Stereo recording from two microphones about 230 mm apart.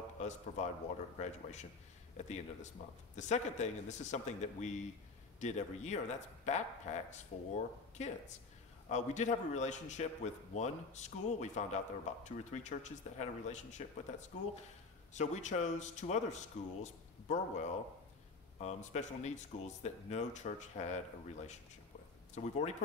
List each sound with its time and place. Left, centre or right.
0.2 s a man's voice: left
15.1 s a man's voice: left